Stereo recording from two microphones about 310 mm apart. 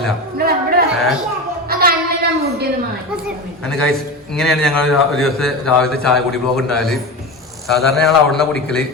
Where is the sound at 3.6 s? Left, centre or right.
Centre.